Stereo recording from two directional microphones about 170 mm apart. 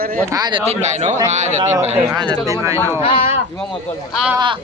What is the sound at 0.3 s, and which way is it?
Speech, 25° right (ahead or behind).